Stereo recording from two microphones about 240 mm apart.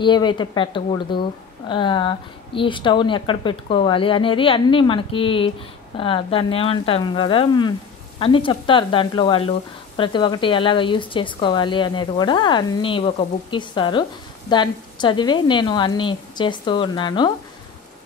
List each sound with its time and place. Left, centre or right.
0.0 s speech: centre